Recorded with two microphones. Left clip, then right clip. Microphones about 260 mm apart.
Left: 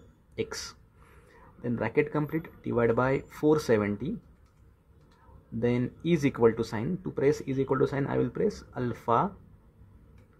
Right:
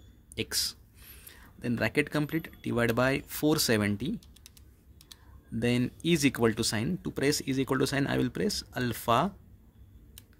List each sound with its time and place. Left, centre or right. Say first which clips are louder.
0.4 s speech: right 2 dB; right
5.6 s speech: left 1 dB; right